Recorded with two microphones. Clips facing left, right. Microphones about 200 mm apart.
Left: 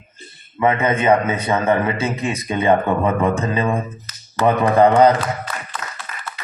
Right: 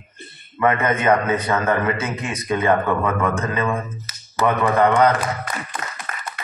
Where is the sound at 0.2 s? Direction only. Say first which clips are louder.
Right 2 dB; 60° right (ahead or behind).